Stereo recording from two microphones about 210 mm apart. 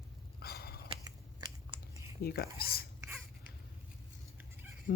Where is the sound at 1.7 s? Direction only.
15° right (ahead or behind).